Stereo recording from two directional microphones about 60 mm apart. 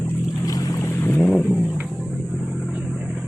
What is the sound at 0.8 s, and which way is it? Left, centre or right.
Vehicle, left.